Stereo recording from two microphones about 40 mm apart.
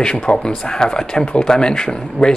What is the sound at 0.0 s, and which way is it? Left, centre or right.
Speech, left.